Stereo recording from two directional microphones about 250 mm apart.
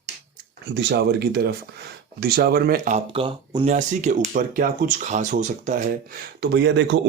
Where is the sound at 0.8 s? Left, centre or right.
Right.